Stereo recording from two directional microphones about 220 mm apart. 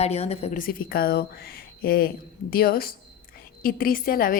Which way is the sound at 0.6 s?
40° left (ahead or behind).